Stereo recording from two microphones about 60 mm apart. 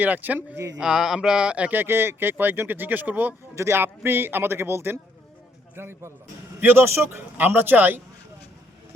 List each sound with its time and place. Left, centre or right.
0.0 s speech: right
0.8 s a sound: centre
1.7 s speech: right
3.5 s speech: right
7.3 s speech: right